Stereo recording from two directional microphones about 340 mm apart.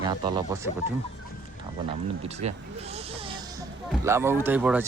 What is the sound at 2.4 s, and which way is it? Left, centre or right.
Speech, centre.